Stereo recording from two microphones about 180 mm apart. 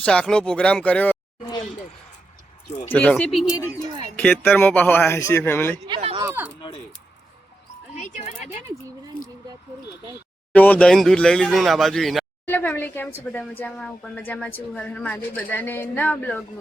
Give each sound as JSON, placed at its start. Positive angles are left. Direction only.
{"t": 0.0, "sound": "speech", "side_deg": 5}
{"t": 2.9, "sound": "speech", "side_deg": 5}
{"t": 4.2, "sound": "speech", "side_deg": 5}
{"t": 5.8, "sound": "speech", "side_deg": -30}
{"t": 6.2, "sound": "speech", "side_deg": -10}
{"t": 7.9, "sound": "speech", "side_deg": 40}
{"t": 10.5, "sound": "speech", "side_deg": 10}